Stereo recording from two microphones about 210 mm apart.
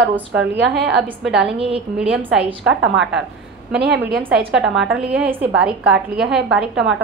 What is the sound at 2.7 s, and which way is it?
Speech, 60° right (ahead or behind).